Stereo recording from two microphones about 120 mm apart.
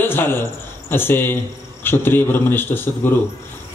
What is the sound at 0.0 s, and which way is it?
A man's voice, 15° left (ahead or behind).